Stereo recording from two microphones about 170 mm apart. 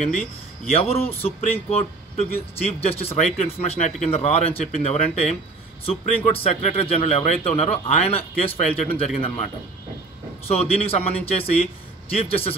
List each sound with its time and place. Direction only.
0.7 s speech: 35° left (ahead or behind)
1.0 s speech: 10° left (ahead or behind)
2.1 s speech: 40° left (ahead or behind)
10.5 s speech: 35° left (ahead or behind)